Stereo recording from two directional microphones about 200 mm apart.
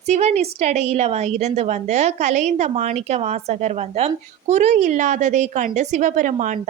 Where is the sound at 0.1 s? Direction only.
35° right (ahead or behind).